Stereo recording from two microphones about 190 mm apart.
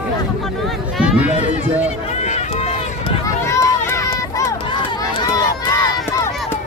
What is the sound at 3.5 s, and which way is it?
Run, 15° left (ahead or behind).